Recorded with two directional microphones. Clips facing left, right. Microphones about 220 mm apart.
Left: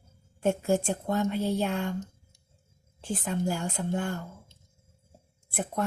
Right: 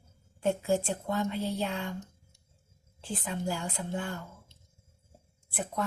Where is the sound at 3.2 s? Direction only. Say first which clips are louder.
Left 4 dB; 45° left (ahead or behind).